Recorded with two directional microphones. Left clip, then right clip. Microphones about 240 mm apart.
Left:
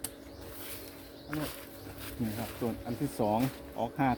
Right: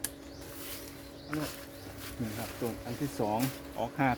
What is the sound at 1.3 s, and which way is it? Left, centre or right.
Speech, centre.